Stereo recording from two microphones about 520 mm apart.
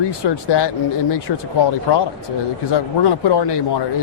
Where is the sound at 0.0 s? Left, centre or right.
Left.